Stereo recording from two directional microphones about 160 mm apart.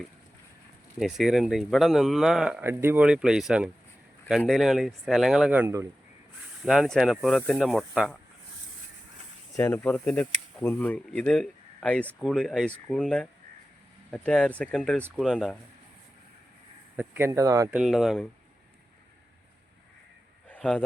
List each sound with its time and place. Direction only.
0.9 s a man's voice: 5° right (ahead or behind)
6.6 s a man's voice: centre (ahead or behind)
9.6 s a man's voice: 10° left (ahead or behind)
17.0 s speech: 15° right (ahead or behind)
17.7 s a man's voice: 5° right (ahead or behind)
20.5 s a sound: 5° left (ahead or behind)